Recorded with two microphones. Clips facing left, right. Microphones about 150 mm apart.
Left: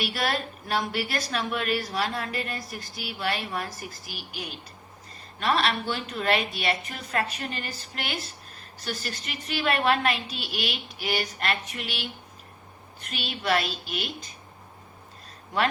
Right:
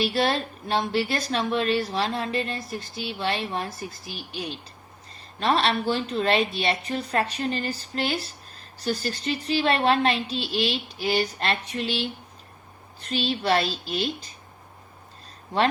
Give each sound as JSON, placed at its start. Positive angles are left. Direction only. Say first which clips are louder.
{"t": 0.0, "sound": "a woman's voice", "louder": "right 5 dB", "side_deg": -25}